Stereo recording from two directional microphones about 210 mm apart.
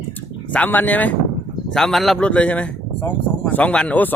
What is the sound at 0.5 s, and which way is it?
Speech, 10° left (ahead or behind).